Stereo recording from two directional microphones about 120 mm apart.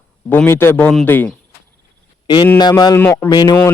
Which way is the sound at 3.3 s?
35° left (ahead or behind).